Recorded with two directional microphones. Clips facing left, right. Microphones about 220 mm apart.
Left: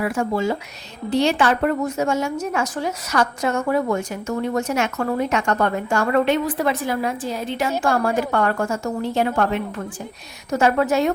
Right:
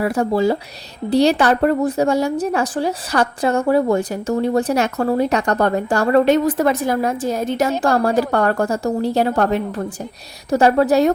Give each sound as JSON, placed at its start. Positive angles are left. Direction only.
{"t": 0.0, "sound": "speech", "side_deg": -35}